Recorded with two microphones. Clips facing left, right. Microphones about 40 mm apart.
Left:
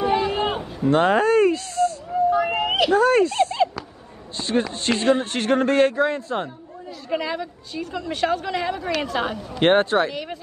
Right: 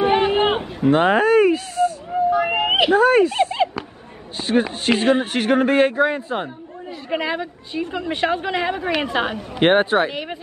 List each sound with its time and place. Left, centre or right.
0.0 s a sound: right
0.8 s speech: centre
2.0 s a sound: right
2.5 s speech: right
4.4 s speech: centre
7.1 s a woman's voice: right
9.6 s speech: centre
10.1 s a woman's voice: right